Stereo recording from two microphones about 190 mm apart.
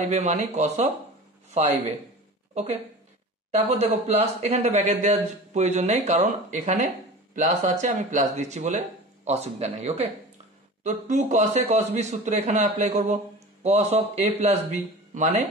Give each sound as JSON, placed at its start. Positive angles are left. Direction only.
{"t": 0.1, "sound": "a man's voice", "side_deg": -35}
{"t": 2.5, "sound": "a man's voice", "side_deg": -35}